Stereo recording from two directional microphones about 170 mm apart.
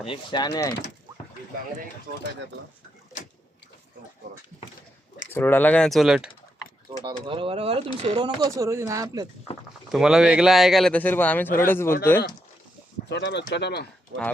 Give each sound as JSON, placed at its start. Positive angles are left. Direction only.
{"t": 0.0, "sound": "speech", "side_deg": 30}
{"t": 5.3, "sound": "speech", "side_deg": 10}
{"t": 7.0, "sound": "speech", "side_deg": -30}
{"t": 9.9, "sound": "speech", "side_deg": -5}
{"t": 13.1, "sound": "speech", "side_deg": 90}
{"t": 13.5, "sound": "speech", "side_deg": 75}
{"t": 14.1, "sound": "speech", "side_deg": -90}